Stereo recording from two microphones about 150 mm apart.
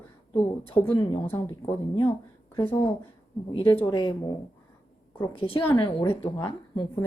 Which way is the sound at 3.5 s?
35° left (ahead or behind).